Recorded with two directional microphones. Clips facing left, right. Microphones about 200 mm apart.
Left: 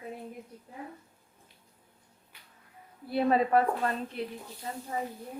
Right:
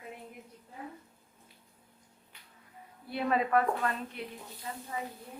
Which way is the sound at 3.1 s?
35° left (ahead or behind).